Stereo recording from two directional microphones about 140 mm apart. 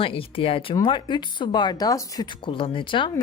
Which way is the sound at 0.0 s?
40° left (ahead or behind).